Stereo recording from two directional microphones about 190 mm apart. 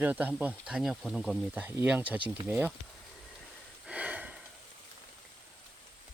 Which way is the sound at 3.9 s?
5° right (ahead or behind).